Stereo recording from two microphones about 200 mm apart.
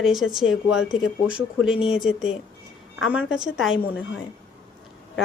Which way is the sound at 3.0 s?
5° right (ahead or behind).